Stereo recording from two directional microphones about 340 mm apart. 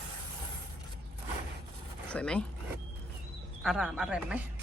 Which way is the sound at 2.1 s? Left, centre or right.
Centre.